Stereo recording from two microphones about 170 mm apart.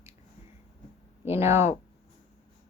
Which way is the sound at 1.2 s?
15° right (ahead or behind).